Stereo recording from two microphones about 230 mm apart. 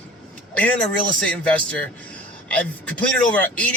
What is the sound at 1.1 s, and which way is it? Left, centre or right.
Speech, centre.